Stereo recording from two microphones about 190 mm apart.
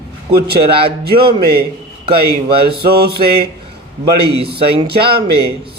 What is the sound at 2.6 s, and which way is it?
Speech, 55° right (ahead or behind).